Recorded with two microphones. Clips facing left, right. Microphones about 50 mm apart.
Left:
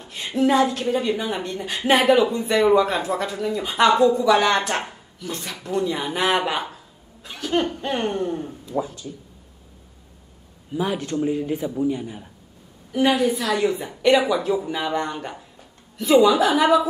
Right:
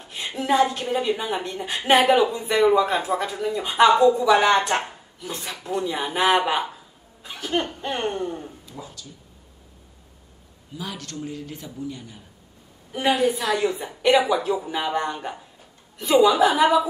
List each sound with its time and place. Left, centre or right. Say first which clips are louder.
0.0 s a woman's voice: left 8 dB; centre
4.8 s a sound: left 2 dB; centre
5.6 s a woman's voice: left 2 dB; centre
8.7 s speech: left 16 dB; left
10.7 s speech: left 10 dB; left
12.9 s a woman's voice: left 2 dB; centre